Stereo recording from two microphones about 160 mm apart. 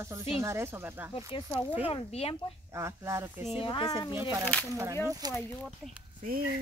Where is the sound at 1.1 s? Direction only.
30° left (ahead or behind).